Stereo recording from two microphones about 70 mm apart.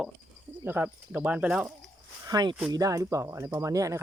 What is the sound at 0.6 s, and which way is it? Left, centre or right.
Speech, right.